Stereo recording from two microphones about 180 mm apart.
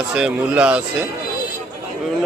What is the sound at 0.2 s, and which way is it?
Speech, 5° right (ahead or behind).